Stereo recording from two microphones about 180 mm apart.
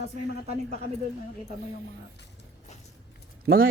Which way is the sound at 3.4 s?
60° right (ahead or behind).